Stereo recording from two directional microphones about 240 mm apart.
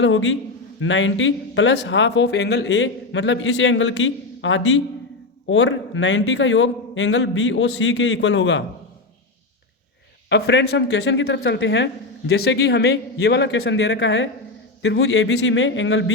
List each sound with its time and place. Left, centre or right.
0.0 s a man's voice: left
10.2 s a man's voice: left